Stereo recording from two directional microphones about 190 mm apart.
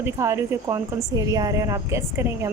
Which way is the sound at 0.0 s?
15° right (ahead or behind).